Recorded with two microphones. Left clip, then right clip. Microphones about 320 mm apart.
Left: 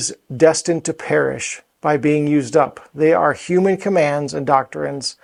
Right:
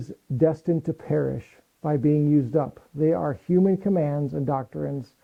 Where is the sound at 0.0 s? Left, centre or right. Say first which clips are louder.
Left 9 dB; centre.